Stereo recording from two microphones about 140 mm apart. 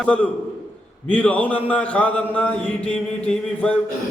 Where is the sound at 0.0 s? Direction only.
10° left (ahead or behind).